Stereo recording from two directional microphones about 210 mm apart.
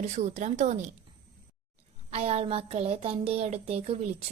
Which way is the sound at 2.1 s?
30° right (ahead or behind).